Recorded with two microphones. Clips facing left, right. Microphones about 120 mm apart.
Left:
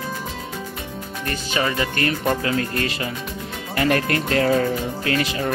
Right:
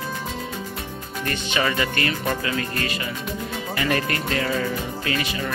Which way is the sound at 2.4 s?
40° left (ahead or behind).